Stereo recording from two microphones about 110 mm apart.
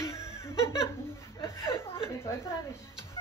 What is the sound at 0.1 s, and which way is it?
Laughter, 25° left (ahead or behind).